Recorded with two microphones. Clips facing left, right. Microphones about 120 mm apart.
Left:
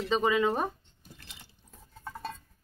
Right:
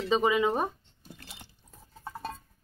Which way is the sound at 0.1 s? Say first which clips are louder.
Right 1 dB; 5° right (ahead or behind).